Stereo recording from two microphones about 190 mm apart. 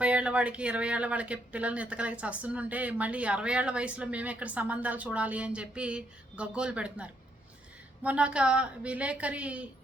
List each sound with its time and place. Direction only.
0.0 s speech: 5° right (ahead or behind)